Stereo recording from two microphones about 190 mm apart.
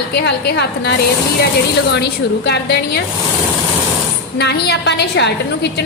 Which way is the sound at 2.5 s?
60° left (ahead or behind).